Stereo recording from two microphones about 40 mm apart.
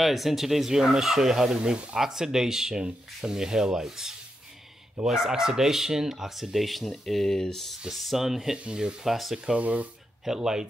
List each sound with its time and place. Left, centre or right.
0.0 s speech: centre
7.9 s speech: centre
8.7 s speech: right
9.0 s speech: centre
9.6 s speech: right
10.2 s speech: centre